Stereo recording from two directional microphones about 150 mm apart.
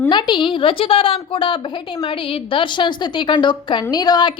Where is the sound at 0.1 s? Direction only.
30° left (ahead or behind).